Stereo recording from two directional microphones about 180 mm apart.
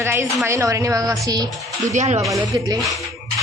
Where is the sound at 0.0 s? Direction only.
15° right (ahead or behind).